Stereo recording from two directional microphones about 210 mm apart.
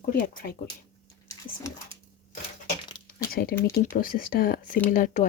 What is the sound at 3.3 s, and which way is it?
Speech, 45° left (ahead or behind).